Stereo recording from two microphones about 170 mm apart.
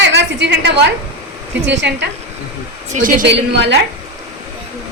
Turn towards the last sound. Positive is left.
turn(degrees=-90)